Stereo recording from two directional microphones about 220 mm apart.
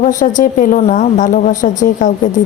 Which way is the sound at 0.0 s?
35° left (ahead or behind).